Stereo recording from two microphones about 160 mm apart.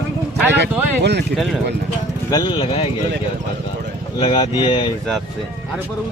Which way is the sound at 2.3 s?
25° left (ahead or behind).